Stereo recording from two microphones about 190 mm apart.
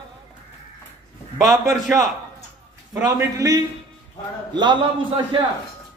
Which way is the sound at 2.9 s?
15° right (ahead or behind).